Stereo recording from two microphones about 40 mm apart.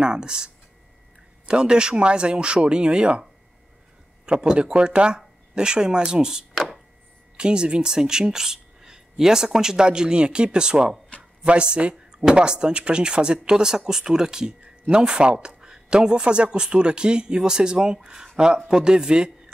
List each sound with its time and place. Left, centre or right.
0.0 s speech: right
4.3 s speech: right
7.3 s speech: right